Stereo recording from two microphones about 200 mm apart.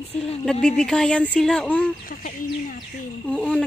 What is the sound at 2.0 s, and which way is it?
Speech, 45° left (ahead or behind).